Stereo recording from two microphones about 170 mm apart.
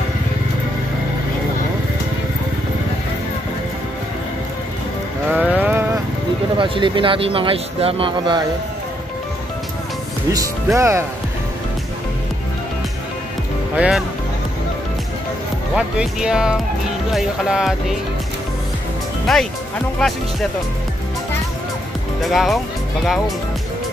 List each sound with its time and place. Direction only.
5.3 s a sound: 10° right (ahead or behind)
6.6 s speech: 30° right (ahead or behind)
10.3 s speech: 15° right (ahead or behind)
13.7 s speech: 5° right (ahead or behind)
15.7 s speech: 5° right (ahead or behind)
19.3 s speech: centre (ahead or behind)
22.2 s speech: centre (ahead or behind)